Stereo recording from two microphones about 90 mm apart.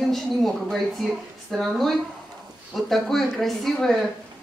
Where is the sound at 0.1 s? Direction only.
Centre (ahead or behind).